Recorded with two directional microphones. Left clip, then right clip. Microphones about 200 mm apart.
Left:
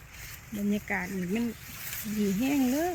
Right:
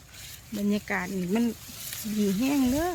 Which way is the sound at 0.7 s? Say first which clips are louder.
Right 2 dB; 10° right (ahead or behind).